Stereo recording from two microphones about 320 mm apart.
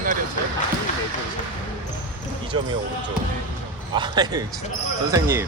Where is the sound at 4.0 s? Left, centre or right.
Centre.